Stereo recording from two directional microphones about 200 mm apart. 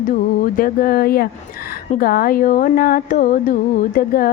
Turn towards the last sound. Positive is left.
turn(degrees=45)  # may be behind; listen again after turning